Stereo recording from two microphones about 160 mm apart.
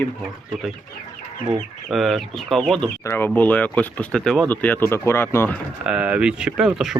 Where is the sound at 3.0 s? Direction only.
15° left (ahead or behind).